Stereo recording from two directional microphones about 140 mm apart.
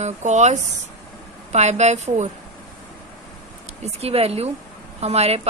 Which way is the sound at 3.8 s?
45° right (ahead or behind).